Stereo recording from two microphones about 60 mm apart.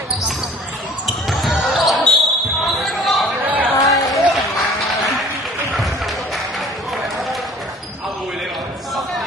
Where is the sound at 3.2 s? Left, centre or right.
Right.